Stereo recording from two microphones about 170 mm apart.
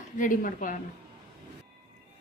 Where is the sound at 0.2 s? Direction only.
50° left (ahead or behind).